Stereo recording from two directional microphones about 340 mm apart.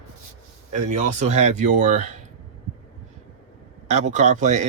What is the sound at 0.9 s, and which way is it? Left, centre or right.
Speech, right.